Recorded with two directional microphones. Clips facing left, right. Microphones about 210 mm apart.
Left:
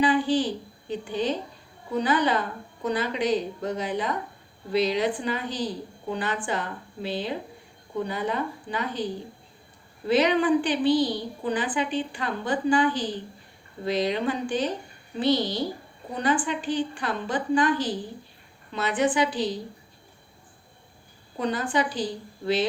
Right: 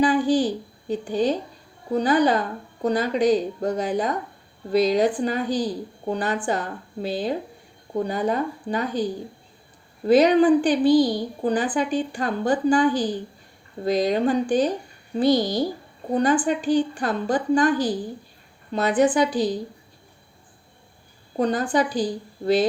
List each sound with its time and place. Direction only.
0.0 s a woman's voice: 40° right (ahead or behind)
10.1 s a woman's voice: 40° right (ahead or behind)
21.3 s a woman's voice: 40° right (ahead or behind)